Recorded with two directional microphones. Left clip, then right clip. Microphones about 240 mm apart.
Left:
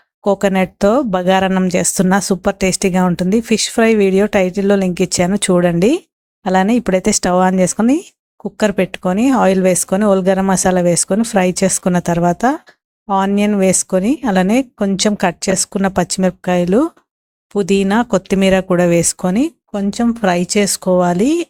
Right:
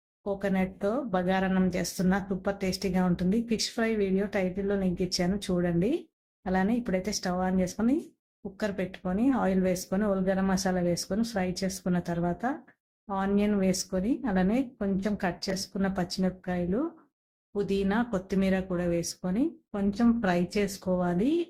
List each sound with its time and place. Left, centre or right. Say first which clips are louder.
0.3 s speech: left 16 dB; left